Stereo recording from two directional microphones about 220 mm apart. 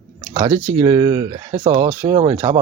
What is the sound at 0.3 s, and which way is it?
Speech, 15° right (ahead or behind).